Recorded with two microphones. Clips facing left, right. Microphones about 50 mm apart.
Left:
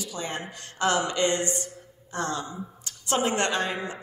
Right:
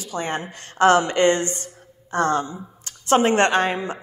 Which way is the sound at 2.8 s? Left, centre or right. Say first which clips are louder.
Right 8 dB; right.